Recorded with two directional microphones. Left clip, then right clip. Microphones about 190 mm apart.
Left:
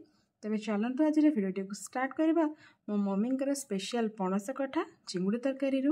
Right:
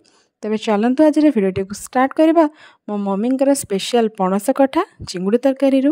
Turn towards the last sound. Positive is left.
turn(degrees=-45)  # may be behind; listen again after turning